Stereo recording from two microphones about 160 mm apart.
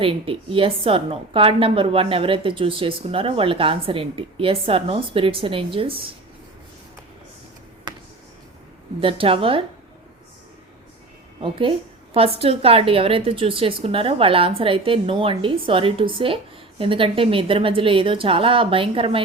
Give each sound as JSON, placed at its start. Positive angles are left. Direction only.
{"t": 0.0, "sound": "a woman's voice", "side_deg": -35}
{"t": 9.0, "sound": "a woman's voice", "side_deg": -35}
{"t": 11.3, "sound": "a woman's voice", "side_deg": -35}